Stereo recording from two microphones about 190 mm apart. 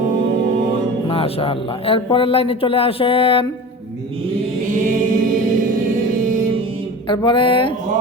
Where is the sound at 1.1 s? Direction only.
30° left (ahead or behind).